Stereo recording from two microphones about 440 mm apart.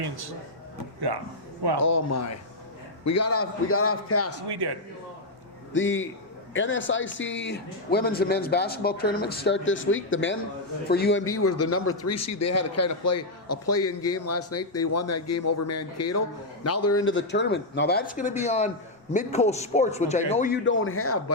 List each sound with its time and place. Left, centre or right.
1.8 s a man's voice: left
4.4 s speech: right
5.7 s a man's voice: left